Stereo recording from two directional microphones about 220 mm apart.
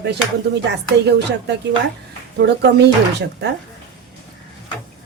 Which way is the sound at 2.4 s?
50° right (ahead or behind).